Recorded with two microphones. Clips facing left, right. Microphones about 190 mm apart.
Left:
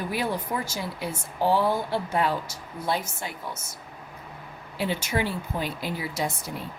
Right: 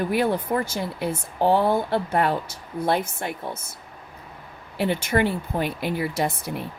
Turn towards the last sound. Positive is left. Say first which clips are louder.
# right 5 dB
turn(degrees=-60)  # may be behind; listen again after turning